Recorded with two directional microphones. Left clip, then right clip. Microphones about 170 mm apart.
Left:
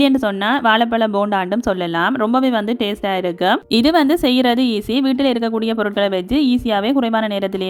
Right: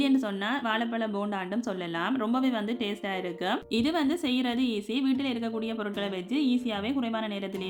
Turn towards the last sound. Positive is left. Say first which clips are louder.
# left 14 dB
turn(degrees=50)  # may be behind; listen again after turning